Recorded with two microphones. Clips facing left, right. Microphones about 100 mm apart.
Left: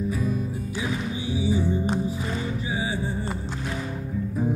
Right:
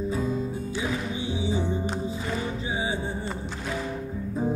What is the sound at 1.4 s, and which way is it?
Music, 25° right (ahead or behind).